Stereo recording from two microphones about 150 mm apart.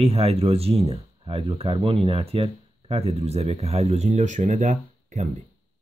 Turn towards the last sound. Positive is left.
turn(degrees=-55)  # may be behind; listen again after turning